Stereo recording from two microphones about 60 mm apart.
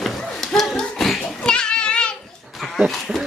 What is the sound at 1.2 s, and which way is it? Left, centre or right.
Child singing, centre.